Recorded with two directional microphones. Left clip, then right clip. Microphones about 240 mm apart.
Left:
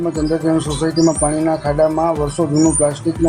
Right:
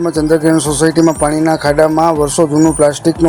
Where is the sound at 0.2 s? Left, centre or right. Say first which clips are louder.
Right 7 dB; right.